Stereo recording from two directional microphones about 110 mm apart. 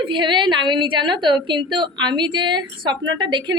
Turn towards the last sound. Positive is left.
turn(degrees=-45)  # may be behind; listen again after turning